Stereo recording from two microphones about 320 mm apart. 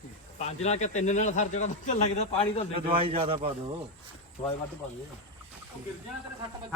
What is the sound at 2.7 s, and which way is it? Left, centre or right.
Speech, centre.